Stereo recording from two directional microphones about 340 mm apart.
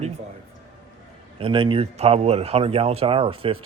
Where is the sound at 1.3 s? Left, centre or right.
Centre.